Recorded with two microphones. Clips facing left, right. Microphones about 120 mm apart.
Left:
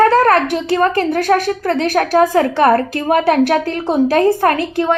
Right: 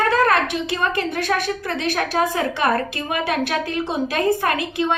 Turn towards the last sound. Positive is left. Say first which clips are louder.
# left 6 dB
turn(degrees=45)  # may be behind; listen again after turning